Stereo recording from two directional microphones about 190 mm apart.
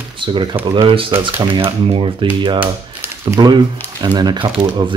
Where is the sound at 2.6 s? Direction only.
10° right (ahead or behind).